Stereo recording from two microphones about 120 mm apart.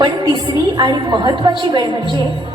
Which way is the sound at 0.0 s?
40° right (ahead or behind).